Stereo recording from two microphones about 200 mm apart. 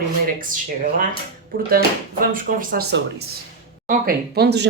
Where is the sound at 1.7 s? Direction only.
45° right (ahead or behind).